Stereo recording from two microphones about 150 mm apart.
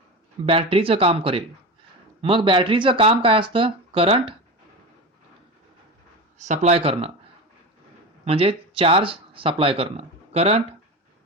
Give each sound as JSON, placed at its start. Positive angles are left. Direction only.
{"t": 0.4, "sound": "speech", "side_deg": -35}
{"t": 6.4, "sound": "speech", "side_deg": -50}
{"t": 8.2, "sound": "speech", "side_deg": -40}